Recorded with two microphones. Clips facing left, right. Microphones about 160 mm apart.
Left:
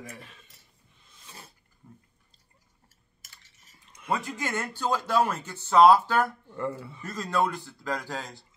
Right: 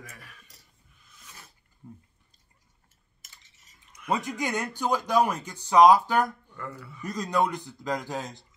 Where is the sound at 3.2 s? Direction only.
20° right (ahead or behind).